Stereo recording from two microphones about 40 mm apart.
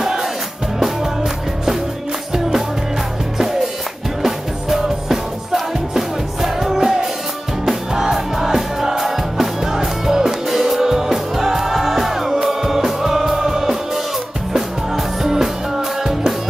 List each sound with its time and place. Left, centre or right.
4.2 s music: centre
15.2 s music: centre